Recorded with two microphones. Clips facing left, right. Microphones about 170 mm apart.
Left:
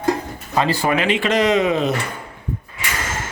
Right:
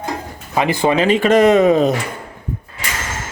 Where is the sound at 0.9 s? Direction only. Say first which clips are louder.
Right 8 dB; 40° right (ahead or behind).